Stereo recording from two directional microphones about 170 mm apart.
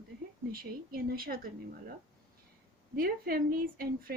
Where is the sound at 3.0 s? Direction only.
60° right (ahead or behind).